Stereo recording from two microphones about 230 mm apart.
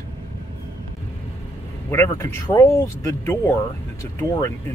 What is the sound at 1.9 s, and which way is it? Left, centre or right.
Speech, centre.